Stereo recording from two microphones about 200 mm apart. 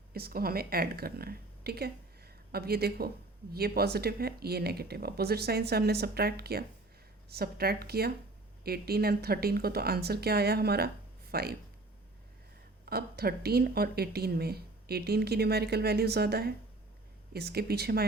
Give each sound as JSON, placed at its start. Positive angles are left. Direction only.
{"t": 0.1, "sound": "speech", "side_deg": -50}
{"t": 12.8, "sound": "speech", "side_deg": -50}